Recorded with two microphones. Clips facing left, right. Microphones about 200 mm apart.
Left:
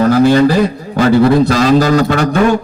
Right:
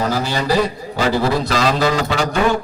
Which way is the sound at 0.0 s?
55° left (ahead or behind).